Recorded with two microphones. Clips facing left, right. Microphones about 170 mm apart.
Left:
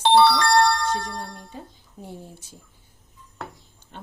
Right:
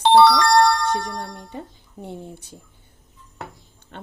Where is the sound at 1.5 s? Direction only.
65° right (ahead or behind).